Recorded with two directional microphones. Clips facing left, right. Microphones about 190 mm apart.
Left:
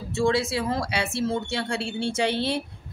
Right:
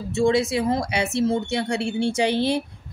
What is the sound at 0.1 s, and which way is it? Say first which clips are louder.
Speech: right 3 dB; 20° right (ahead or behind).